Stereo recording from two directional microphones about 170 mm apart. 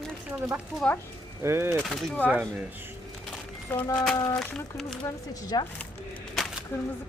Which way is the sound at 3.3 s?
10° left (ahead or behind).